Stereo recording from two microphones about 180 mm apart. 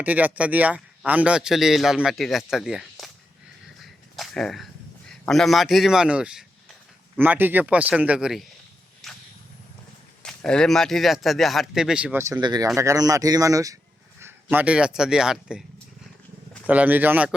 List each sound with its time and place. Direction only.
0.0 s a man's voice: 10° right (ahead or behind)
4.1 s a man's voice: centre (ahead or behind)
9.0 s a sound: centre (ahead or behind)
10.2 s a man's voice: 5° left (ahead or behind)
12.4 s speech: 20° right (ahead or behind)
14.5 s a man's voice: 5° right (ahead or behind)
16.6 s speech: 10° right (ahead or behind)